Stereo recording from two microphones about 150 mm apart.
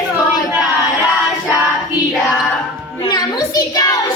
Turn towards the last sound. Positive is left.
turn(degrees=25)  # may be behind; listen again after turning